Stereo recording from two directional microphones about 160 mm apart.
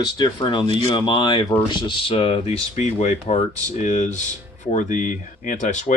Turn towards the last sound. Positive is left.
turn(degrees=50)  # may be behind; listen again after turning